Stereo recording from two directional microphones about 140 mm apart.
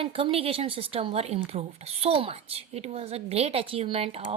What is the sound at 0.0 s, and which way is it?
Speech, 45° right (ahead or behind).